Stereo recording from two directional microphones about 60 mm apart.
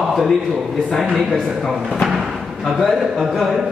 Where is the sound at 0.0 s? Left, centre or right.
Centre.